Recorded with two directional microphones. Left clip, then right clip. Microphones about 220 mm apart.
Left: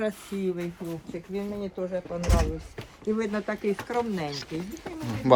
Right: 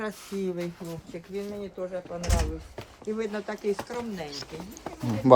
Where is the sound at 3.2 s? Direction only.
40° left (ahead or behind).